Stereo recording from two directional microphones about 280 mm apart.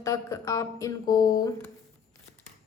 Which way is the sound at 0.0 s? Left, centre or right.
Centre.